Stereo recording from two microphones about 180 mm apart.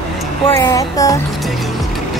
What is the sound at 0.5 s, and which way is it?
Speech, 20° left (ahead or behind).